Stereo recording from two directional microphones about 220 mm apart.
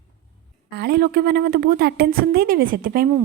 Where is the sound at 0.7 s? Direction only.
45° right (ahead or behind).